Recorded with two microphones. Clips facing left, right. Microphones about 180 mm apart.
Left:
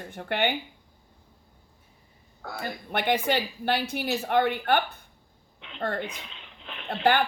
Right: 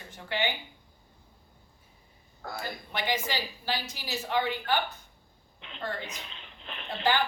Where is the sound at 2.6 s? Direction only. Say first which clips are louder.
Left 5 dB; 60° left (ahead or behind).